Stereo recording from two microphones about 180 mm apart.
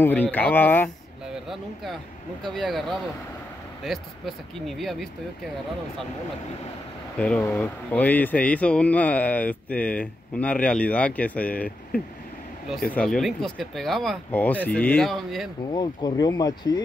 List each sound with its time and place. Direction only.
0.0 s speech: 10° left (ahead or behind)
2.4 s speech: 5° left (ahead or behind)
7.5 s speech: 10° left (ahead or behind)
15.7 s speech: 25° left (ahead or behind)